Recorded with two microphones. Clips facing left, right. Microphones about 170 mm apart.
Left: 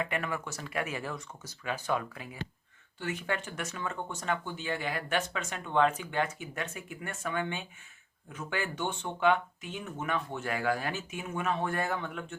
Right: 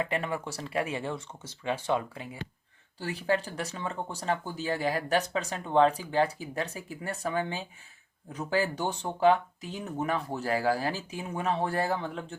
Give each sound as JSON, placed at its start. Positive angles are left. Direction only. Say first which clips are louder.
{"t": 0.0, "sound": "speech", "louder": "right 3 dB", "side_deg": -30}